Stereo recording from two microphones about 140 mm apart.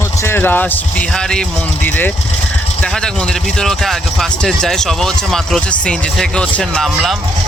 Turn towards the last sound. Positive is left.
turn(degrees=5)  # may be behind; listen again after turning